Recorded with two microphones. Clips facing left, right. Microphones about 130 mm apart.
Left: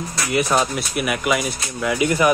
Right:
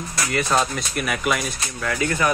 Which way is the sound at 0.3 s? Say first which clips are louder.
Left 3 dB; 10° left (ahead or behind).